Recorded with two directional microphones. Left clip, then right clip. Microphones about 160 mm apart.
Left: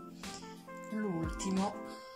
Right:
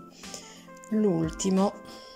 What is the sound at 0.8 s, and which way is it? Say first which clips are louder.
Speech: right 12 dB; centre (ahead or behind).